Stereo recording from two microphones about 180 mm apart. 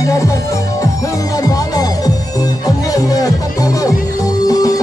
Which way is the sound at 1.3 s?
20° left (ahead or behind).